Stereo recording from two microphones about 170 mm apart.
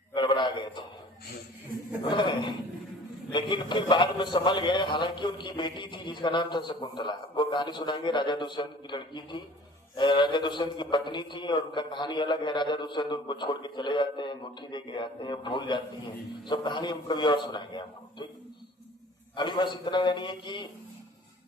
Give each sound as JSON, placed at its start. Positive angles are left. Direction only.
{"t": 0.1, "sound": "a sound", "side_deg": 25}
{"t": 2.0, "sound": "a man's voice", "side_deg": 30}
{"t": 19.4, "sound": "a man's voice", "side_deg": 25}